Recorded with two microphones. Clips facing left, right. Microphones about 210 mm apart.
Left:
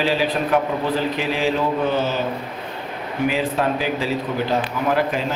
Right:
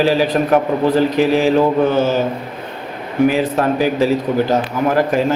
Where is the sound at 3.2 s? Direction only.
45° right (ahead or behind).